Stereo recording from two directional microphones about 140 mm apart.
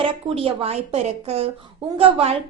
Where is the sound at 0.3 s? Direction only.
45° right (ahead or behind).